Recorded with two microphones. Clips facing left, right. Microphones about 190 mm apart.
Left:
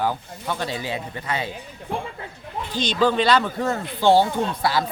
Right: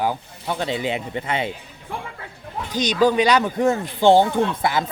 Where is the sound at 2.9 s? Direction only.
10° right (ahead or behind).